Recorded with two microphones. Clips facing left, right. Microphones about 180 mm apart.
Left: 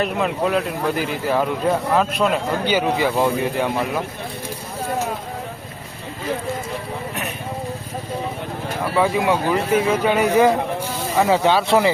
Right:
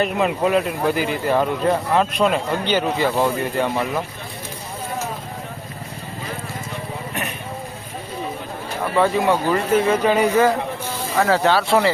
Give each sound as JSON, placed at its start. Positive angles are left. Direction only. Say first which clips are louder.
{"t": 0.0, "sound": "speech", "louder": "right 1 dB", "side_deg": -5}
{"t": 9.0, "sound": "speech", "louder": "right 1 dB", "side_deg": 10}